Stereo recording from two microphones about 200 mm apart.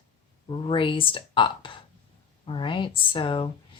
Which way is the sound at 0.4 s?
25° left (ahead or behind).